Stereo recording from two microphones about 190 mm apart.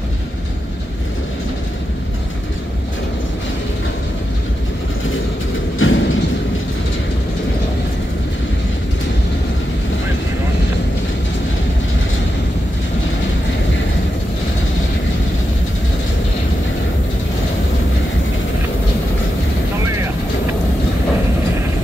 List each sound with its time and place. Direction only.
5.8 s vehicle: 90° left